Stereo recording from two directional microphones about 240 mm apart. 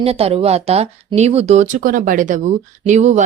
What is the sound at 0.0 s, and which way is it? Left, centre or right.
Speech, right.